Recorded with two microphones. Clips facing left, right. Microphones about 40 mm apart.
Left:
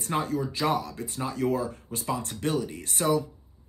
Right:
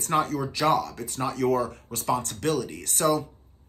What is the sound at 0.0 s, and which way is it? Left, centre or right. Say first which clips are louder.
Speech: right 3 dB; right.